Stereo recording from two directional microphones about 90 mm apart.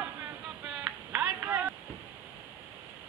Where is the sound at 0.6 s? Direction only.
10° right (ahead or behind).